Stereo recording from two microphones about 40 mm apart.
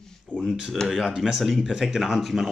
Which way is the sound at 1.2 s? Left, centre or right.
Centre.